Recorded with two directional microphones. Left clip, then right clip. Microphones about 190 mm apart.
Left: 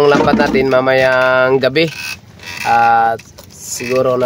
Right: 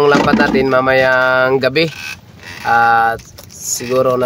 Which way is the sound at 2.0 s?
50° left (ahead or behind).